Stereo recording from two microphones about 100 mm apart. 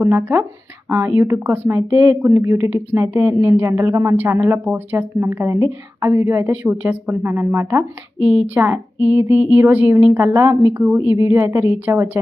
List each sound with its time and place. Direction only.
0.0 s speech: 20° right (ahead or behind)
2.3 s speech: 30° right (ahead or behind)
6.5 s speech: 15° right (ahead or behind)
8.2 s speech: 10° right (ahead or behind)